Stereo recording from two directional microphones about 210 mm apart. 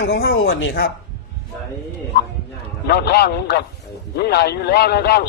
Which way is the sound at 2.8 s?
50° left (ahead or behind).